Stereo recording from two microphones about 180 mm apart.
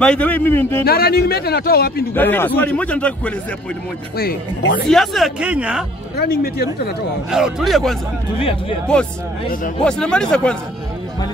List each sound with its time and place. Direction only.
0.0 s a man's voice: 5° left (ahead or behind)
0.8 s a man's voice: 60° left (ahead or behind)
2.1 s a man's voice: 10° left (ahead or behind)
4.2 s a man's voice: 60° left (ahead or behind)
4.8 s speech: centre (ahead or behind)
6.1 s a man's voice: 60° left (ahead or behind)
7.2 s speech: 5° right (ahead or behind)
8.4 s speech: 30° left (ahead or behind)
9.8 s speech: 5° left (ahead or behind)